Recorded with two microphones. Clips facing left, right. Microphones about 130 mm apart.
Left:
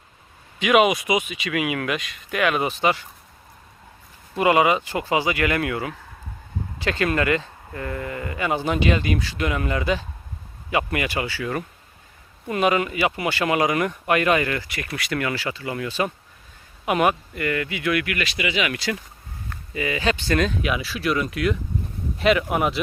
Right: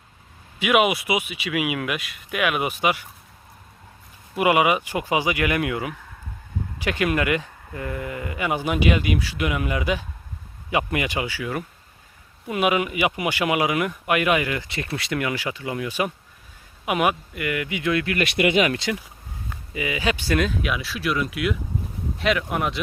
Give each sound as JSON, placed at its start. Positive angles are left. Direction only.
{"t": 0.6, "sound": "speech", "side_deg": -5}
{"t": 4.4, "sound": "speech", "side_deg": -10}
{"t": 14.7, "sound": "speech", "side_deg": -25}
{"t": 18.2, "sound": "speech", "side_deg": -55}
{"t": 18.8, "sound": "speech", "side_deg": -20}
{"t": 19.5, "sound": "speech", "side_deg": -10}